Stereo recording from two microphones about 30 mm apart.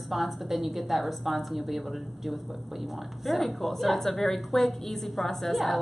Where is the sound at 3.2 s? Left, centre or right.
Centre.